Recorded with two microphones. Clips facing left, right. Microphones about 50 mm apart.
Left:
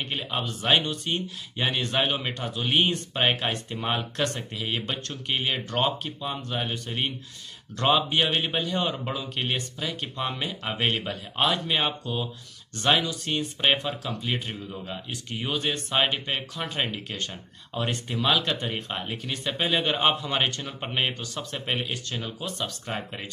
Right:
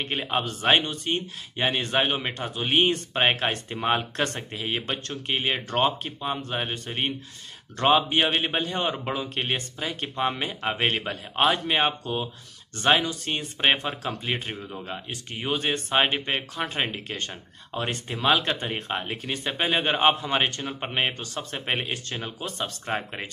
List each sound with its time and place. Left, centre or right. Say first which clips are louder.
0.0 s speech: right 3 dB; right
14.9 s speech: even; right